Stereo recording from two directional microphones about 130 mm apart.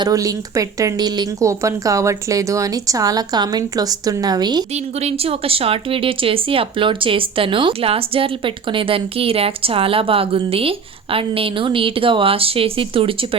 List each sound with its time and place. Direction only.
0.0 s a woman's voice: 25° right (ahead or behind)
4.7 s a woman's voice: 55° right (ahead or behind)